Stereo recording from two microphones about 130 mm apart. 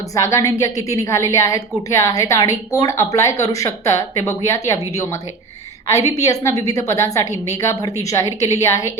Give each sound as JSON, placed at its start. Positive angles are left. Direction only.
{"t": 0.1, "sound": "a woman's voice", "side_deg": 25}